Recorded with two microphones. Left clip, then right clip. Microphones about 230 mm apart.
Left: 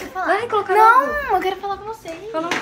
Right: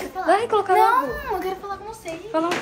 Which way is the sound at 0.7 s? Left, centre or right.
Centre.